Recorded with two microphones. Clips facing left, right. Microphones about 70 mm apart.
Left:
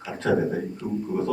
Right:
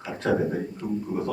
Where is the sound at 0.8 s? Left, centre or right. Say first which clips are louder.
Even; centre.